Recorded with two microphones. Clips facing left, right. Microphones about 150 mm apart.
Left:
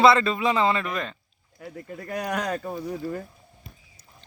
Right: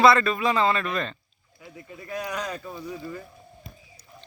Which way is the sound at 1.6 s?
55° left (ahead or behind).